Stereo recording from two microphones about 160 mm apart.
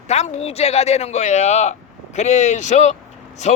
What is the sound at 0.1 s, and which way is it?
A man's voice, 45° left (ahead or behind).